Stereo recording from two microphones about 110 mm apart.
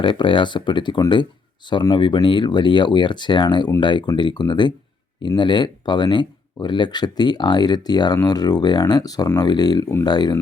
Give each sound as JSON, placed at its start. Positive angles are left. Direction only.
{"t": 0.0, "sound": "speech", "side_deg": 50}